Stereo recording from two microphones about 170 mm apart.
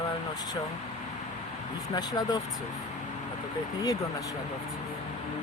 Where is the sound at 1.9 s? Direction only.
25° left (ahead or behind).